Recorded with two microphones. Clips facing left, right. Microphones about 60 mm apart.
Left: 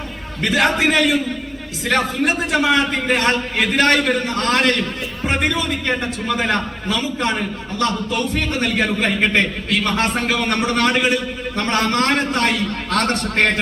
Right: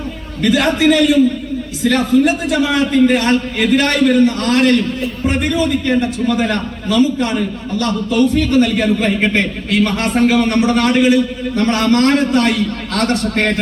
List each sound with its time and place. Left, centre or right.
0.4 s a man's voice: left